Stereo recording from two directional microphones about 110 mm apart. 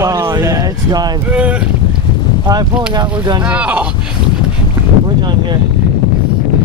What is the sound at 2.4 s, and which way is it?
Speech, 40° right (ahead or behind).